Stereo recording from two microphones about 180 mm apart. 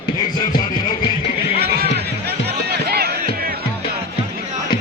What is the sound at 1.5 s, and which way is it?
Music, 60° right (ahead or behind).